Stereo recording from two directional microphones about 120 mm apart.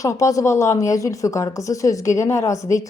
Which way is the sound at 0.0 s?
25° left (ahead or behind).